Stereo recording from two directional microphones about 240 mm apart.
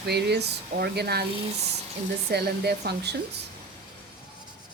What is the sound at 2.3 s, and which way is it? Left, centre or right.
Speech, right.